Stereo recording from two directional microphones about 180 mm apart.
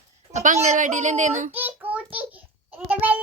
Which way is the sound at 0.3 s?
40° right (ahead or behind).